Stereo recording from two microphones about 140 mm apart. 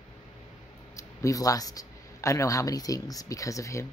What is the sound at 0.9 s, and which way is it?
Speech, 25° left (ahead or behind).